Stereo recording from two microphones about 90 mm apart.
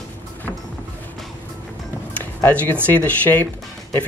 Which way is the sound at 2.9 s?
20° left (ahead or behind).